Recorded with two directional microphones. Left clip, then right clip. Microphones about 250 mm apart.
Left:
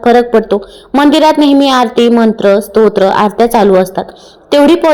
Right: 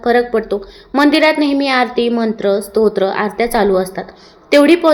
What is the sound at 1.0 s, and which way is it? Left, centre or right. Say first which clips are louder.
Speech: left 4 dB; left.